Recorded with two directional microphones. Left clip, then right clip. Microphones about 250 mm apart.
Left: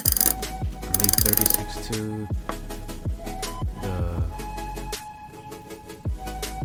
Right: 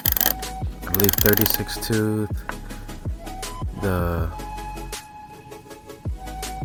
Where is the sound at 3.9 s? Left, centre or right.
Right.